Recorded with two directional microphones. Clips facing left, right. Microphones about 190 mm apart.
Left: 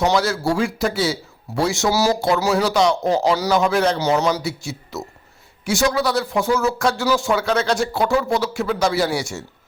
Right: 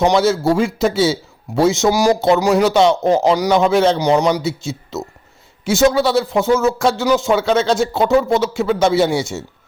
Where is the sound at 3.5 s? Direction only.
25° right (ahead or behind).